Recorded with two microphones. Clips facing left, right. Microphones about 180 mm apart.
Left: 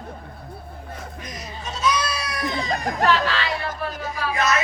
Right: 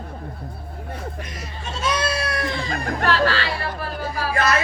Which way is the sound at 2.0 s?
25° right (ahead or behind).